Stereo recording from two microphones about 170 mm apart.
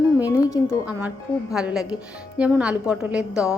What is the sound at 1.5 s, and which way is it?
Speech, 5° right (ahead or behind).